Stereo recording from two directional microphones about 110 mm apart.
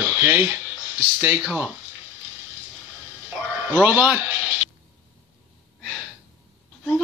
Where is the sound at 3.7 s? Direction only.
15° right (ahead or behind).